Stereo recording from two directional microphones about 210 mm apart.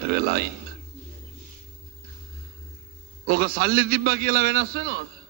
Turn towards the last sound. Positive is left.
turn(degrees=-45)  # may be behind; listen again after turning